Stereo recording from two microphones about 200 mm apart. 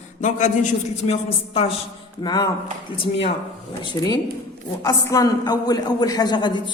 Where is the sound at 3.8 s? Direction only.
20° left (ahead or behind).